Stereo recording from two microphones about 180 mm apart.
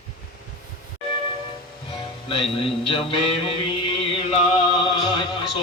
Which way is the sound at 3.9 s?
30° left (ahead or behind).